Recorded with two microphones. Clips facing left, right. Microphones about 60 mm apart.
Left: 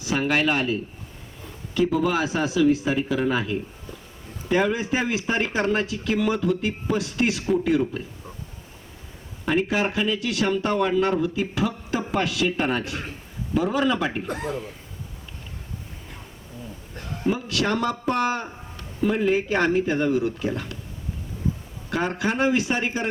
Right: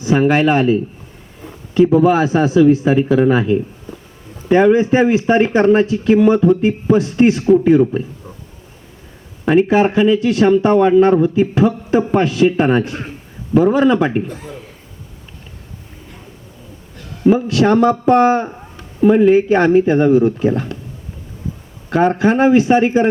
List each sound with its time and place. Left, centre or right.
0.0 s a man's voice: right
4.7 s a man's voice: right
9.6 s a man's voice: right
14.3 s speech: left
17.3 s a man's voice: right
18.8 s a sound: right
19.3 s a man's voice: right
21.8 s a man's voice: right